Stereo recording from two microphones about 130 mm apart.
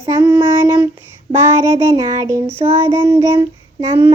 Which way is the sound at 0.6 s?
25° right (ahead or behind).